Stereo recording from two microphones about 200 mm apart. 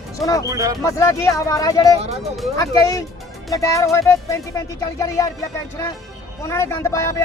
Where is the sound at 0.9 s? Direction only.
15° left (ahead or behind).